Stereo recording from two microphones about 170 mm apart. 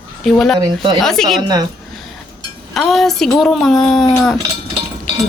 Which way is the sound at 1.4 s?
25° right (ahead or behind).